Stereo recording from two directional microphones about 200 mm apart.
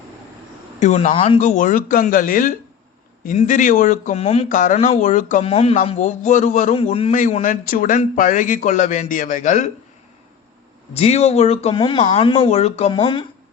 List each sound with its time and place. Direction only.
0.8 s speech: 35° left (ahead or behind)
10.9 s speech: 30° left (ahead or behind)